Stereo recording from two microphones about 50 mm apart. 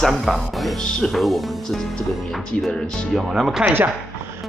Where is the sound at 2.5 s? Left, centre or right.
Centre.